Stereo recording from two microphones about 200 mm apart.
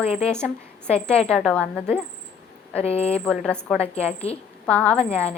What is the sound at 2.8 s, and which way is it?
Speech, 30° left (ahead or behind).